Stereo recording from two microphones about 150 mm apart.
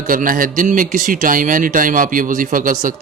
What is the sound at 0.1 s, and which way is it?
A man's voice, 65° right (ahead or behind).